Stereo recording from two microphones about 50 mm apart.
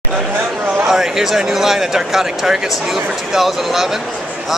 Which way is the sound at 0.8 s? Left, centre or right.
Centre.